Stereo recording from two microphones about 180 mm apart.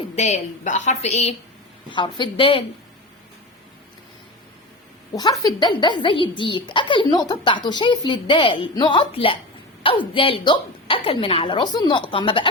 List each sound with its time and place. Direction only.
0.2 s a woman's voice: 40° left (ahead or behind)
1.9 s a child's voice: 25° left (ahead or behind)
5.1 s a child's voice: 20° left (ahead or behind)